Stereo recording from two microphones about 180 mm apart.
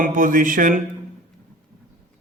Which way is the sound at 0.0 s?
50° right (ahead or behind).